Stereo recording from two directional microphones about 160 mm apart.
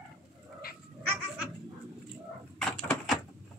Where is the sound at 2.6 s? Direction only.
5° left (ahead or behind).